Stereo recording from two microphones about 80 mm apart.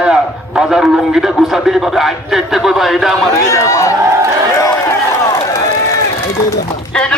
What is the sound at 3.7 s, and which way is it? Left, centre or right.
Speech, left.